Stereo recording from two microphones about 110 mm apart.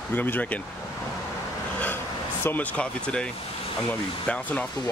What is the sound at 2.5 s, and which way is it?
Speech, 15° left (ahead or behind).